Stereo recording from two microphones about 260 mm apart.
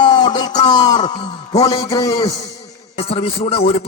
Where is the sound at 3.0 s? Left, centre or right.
Left.